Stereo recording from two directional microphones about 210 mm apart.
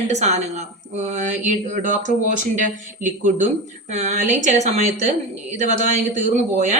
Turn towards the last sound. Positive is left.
turn(degrees=-35)  # may be behind; listen again after turning